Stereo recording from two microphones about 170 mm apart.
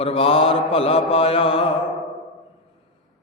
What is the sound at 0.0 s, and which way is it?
A man's voice, 35° left (ahead or behind).